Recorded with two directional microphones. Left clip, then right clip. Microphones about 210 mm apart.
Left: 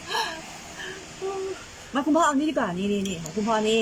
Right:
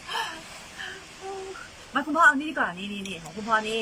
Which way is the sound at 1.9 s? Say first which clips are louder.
Right 2 dB; 15° left (ahead or behind).